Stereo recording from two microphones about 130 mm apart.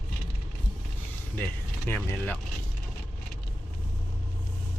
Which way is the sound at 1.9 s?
15° left (ahead or behind).